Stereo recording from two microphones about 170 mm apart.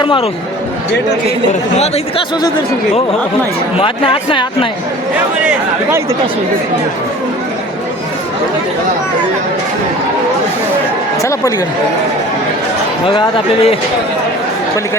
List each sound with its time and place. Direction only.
0.0 s speech: 30° left (ahead or behind)
3.8 s speech: 30° left (ahead or behind)
11.2 s speech: 20° left (ahead or behind)
13.1 s speech: 30° left (ahead or behind)